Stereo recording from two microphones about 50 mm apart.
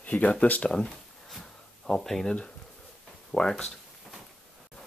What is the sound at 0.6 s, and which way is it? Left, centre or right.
Speech, centre.